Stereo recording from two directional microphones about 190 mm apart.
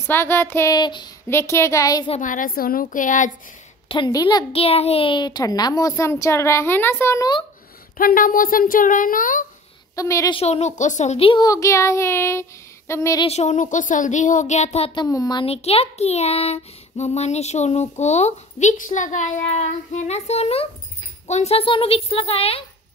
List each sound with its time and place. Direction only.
0.1 s speech: 10° left (ahead or behind)
2.0 s speech: 40° left (ahead or behind)
3.9 s a woman's voice: 25° left (ahead or behind)
8.0 s speech: 45° left (ahead or behind)
9.9 s speech: 15° left (ahead or behind)
10.3 s speech: 35° left (ahead or behind); by 13.2 s 15° left (ahead or behind)
13.2 s speech: 35° left (ahead or behind)
15.0 s speech: 20° left (ahead or behind)